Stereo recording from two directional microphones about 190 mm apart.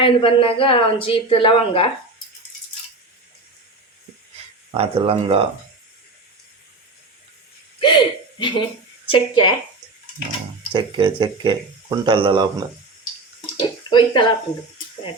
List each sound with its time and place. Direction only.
0.0 s speech: 25° left (ahead or behind)
4.7 s speech: 30° right (ahead or behind)
7.8 s a woman's voice: 25° left (ahead or behind)
10.8 s speech: 25° right (ahead or behind)
13.6 s speech: 25° left (ahead or behind)